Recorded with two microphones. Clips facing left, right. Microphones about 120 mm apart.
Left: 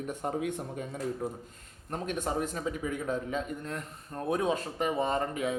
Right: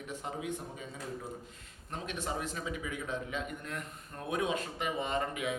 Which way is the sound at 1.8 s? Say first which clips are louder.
Left 5 dB; 45° left (ahead or behind).